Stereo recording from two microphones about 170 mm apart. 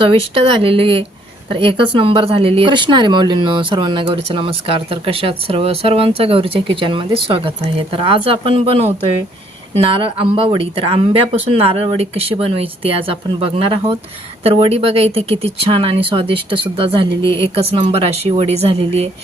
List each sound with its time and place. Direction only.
0.0 s speech: 35° right (ahead or behind)